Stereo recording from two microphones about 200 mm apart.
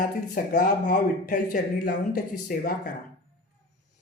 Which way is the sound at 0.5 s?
40° left (ahead or behind).